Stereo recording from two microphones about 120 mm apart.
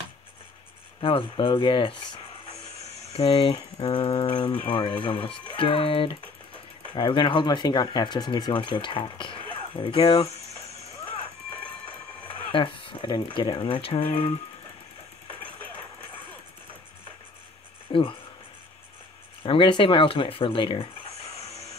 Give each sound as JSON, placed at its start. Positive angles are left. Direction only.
{"t": 1.0, "sound": "speech", "side_deg": 45}
{"t": 3.1, "sound": "speech", "side_deg": 55}
{"t": 12.4, "sound": "speech", "side_deg": 45}
{"t": 17.9, "sound": "writing", "side_deg": 45}
{"t": 19.4, "sound": "speech", "side_deg": 45}